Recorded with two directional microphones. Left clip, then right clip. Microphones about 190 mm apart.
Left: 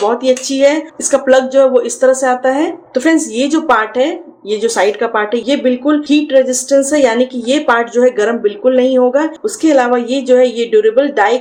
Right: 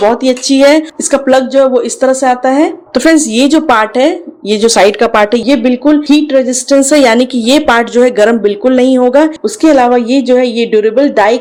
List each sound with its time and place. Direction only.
0.2 s speech: 35° right (ahead or behind)
2.9 s a woman's voice: 50° right (ahead or behind)